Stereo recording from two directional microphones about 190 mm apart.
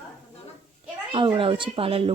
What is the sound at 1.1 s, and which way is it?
Speech, 25° right (ahead or behind).